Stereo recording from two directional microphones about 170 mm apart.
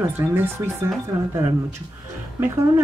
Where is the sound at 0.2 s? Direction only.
15° right (ahead or behind).